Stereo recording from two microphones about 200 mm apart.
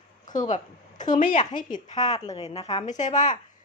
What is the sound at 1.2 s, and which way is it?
Speech, 40° left (ahead or behind).